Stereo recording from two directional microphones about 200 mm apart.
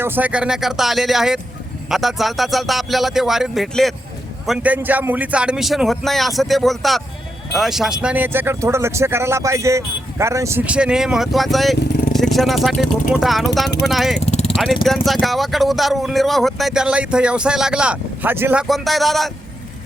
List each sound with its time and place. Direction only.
0.0 s speech: 10° right (ahead or behind)
14.3 s vehicle: 35° left (ahead or behind)
14.5 s speech: centre (ahead or behind)